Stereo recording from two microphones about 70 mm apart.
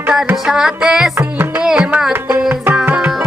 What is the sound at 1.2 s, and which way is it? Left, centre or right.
Music, right.